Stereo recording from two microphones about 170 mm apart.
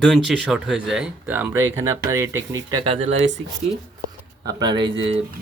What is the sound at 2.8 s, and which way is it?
Speech, 40° right (ahead or behind).